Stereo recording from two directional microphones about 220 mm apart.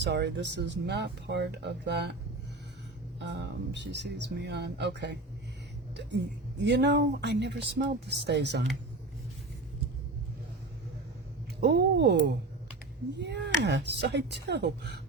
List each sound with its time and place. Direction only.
0.0 s speech: 50° right (ahead or behind)
3.2 s speech: 50° right (ahead or behind)
6.6 s speech: 50° right (ahead or behind)
11.6 s speech: 50° right (ahead or behind)